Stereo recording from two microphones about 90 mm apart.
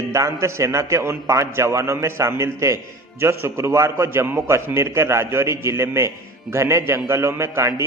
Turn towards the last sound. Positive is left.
turn(degrees=-30)  # may be behind; listen again after turning